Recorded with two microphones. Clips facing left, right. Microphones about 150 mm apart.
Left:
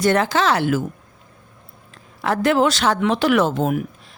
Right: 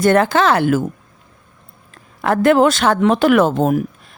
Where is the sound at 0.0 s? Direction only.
50° right (ahead or behind).